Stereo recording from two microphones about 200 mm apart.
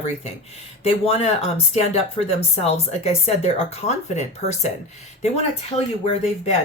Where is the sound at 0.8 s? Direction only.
30° left (ahead or behind).